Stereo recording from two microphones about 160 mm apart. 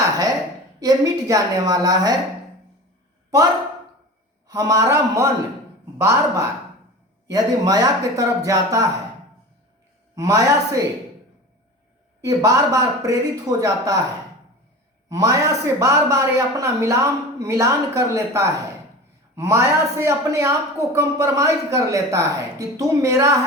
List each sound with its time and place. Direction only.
0.0 s a sound: 20° right (ahead or behind)
0.8 s a woman's voice: 20° right (ahead or behind)
4.4 s a woman's voice: 25° right (ahead or behind)
10.2 s a woman's voice: 20° right (ahead or behind)
12.2 s a woman's voice: 20° right (ahead or behind)
15.1 s a woman's voice: 20° right (ahead or behind)